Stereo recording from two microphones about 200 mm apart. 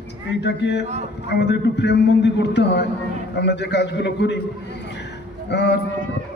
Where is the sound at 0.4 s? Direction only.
60° left (ahead or behind).